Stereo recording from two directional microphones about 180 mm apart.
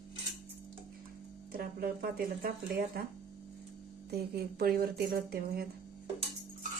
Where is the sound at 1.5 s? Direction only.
55° right (ahead or behind).